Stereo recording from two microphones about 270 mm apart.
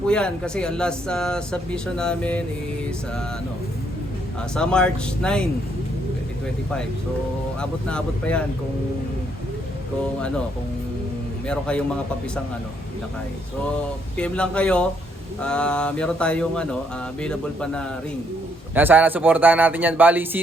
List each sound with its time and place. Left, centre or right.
0.1 s speech: centre
4.5 s speech: centre
7.6 s speech: centre
10.2 s speech: centre
11.4 s speech: centre
14.2 s a man's voice: centre